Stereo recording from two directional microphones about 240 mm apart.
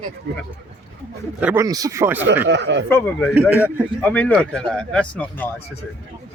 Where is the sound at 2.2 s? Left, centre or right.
Right.